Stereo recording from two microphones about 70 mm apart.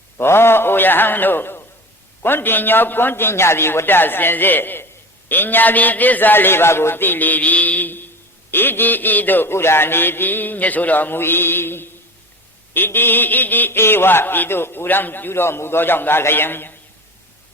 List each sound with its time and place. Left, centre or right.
0.2 s a man's voice: left